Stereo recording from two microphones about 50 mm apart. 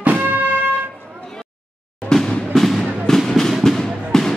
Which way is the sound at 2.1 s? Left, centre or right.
Centre.